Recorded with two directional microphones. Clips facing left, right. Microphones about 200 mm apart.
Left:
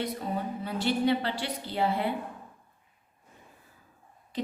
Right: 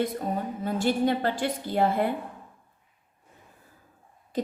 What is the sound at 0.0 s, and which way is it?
A woman's voice, 45° right (ahead or behind).